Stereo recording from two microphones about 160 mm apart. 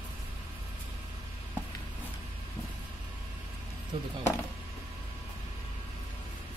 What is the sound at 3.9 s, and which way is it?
Speech, 35° right (ahead or behind).